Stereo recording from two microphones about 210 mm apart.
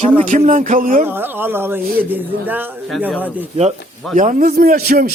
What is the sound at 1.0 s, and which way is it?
Speech, 10° right (ahead or behind).